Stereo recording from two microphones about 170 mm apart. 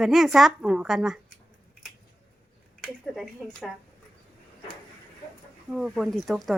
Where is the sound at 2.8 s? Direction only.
Centre (ahead or behind).